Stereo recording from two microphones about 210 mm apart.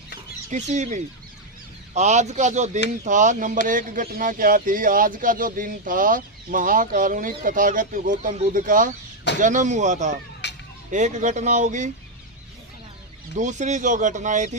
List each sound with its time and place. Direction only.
0.5 s speech: 35° right (ahead or behind)
10.4 s a sound: 55° left (ahead or behind)
10.9 s speech: 35° right (ahead or behind)
13.3 s speech: 35° right (ahead or behind)